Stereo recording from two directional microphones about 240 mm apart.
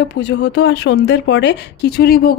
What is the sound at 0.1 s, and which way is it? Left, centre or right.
Speech, left.